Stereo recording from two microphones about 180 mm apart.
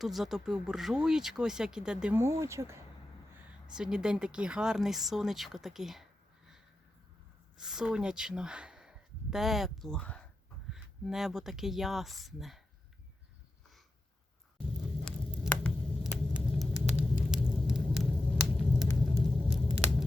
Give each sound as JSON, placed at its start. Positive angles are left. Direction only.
{"t": 0.0, "sound": "speech", "side_deg": 0}
{"t": 3.8, "sound": "speech", "side_deg": -5}
{"t": 7.6, "sound": "speech", "side_deg": -5}
{"t": 15.4, "sound": "a sound", "side_deg": 10}
{"t": 16.3, "sound": "vehicle", "side_deg": -5}
{"t": 18.5, "sound": "a sound", "side_deg": 0}